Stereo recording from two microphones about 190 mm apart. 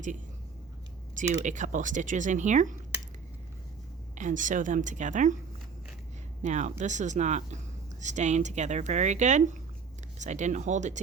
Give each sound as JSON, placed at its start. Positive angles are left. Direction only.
{"t": 1.1, "sound": "speech", "side_deg": -40}
{"t": 4.1, "sound": "speech", "side_deg": -40}
{"t": 6.4, "sound": "speech", "side_deg": -40}